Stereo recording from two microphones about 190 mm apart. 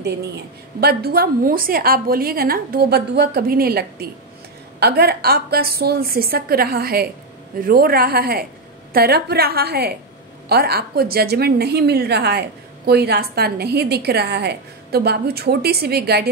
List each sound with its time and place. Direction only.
0.7 s a woman's voice: 55° right (ahead or behind)